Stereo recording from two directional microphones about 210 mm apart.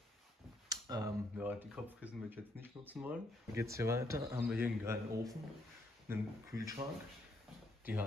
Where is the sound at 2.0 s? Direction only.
10° right (ahead or behind).